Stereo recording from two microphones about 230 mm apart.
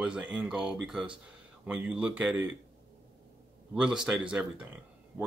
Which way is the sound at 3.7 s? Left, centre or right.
Centre.